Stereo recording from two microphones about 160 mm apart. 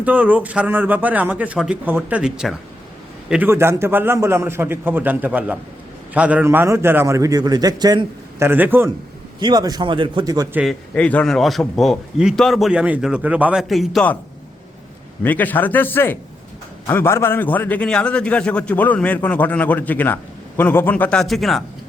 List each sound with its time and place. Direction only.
0.0 s a man's voice: 10° right (ahead or behind)
9.4 s a man's voice: 25° right (ahead or behind)
10.5 s a man's voice: 5° right (ahead or behind)
10.9 s a man's voice: 10° left (ahead or behind)
15.2 s a man's voice: 10° left (ahead or behind)